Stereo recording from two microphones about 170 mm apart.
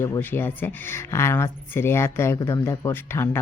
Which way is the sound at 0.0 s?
15° left (ahead or behind).